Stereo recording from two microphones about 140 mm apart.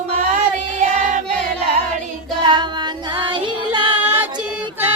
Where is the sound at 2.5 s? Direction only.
30° right (ahead or behind).